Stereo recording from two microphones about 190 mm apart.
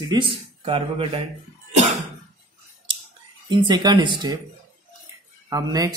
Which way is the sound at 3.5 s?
25° right (ahead or behind).